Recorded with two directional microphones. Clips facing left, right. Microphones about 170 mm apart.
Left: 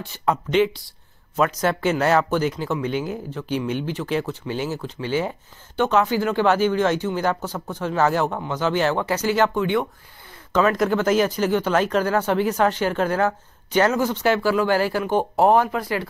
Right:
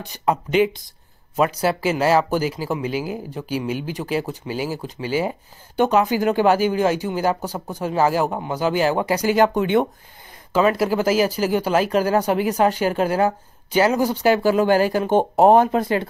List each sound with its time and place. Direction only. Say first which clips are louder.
0.0 s speech: right 1 dB; 15° right (ahead or behind)
10.5 s speech: right 1 dB; 10° right (ahead or behind)